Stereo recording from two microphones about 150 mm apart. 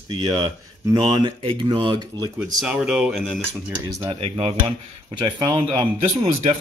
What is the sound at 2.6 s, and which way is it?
Speech, 5° right (ahead or behind).